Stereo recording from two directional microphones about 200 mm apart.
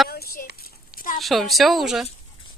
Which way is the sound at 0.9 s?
45° left (ahead or behind).